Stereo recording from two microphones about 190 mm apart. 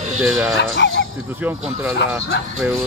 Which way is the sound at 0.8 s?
70° left (ahead or behind).